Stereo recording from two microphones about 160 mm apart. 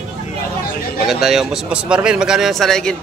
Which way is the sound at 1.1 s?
Centre (ahead or behind).